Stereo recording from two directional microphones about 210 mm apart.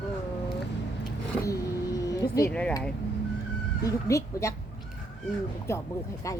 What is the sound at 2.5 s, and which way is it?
Speech, 5° left (ahead or behind).